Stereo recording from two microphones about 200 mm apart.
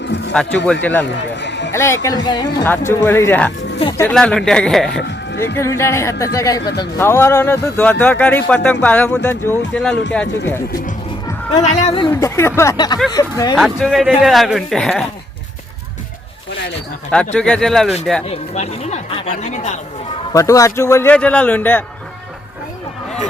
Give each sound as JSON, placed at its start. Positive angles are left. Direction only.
{"t": 0.3, "sound": "speech", "side_deg": 5}
{"t": 1.0, "sound": "run", "side_deg": 60}
{"t": 1.7, "sound": "speech", "side_deg": 15}
{"t": 5.5, "sound": "speech", "side_deg": 15}
{"t": 11.5, "sound": "speech", "side_deg": 35}
{"t": 12.1, "sound": "speech", "side_deg": 10}
{"t": 13.6, "sound": "speech", "side_deg": 0}
{"t": 17.3, "sound": "speech", "side_deg": 5}
{"t": 18.3, "sound": "speech", "side_deg": 30}
{"t": 20.3, "sound": "speech", "side_deg": 15}